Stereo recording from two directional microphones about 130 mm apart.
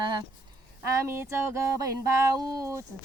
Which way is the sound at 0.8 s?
20° right (ahead or behind).